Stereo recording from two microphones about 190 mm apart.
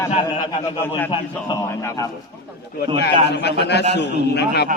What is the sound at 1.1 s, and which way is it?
Speech, 20° left (ahead or behind).